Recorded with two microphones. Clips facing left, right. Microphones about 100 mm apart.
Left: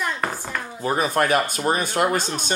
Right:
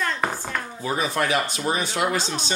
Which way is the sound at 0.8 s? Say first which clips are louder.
Left 4 dB; 45° left (ahead or behind).